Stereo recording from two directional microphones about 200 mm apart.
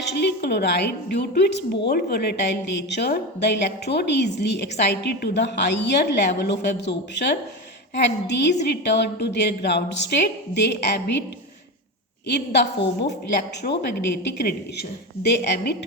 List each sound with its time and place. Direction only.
0.1 s a woman's voice: 55° left (ahead or behind)
12.5 s a woman's voice: 60° left (ahead or behind)
13.6 s a woman's voice: 45° left (ahead or behind)